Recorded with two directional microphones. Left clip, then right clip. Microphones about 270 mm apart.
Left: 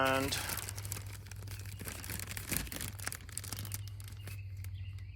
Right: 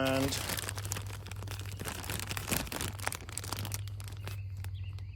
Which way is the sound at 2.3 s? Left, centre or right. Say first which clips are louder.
Right 5 dB; right.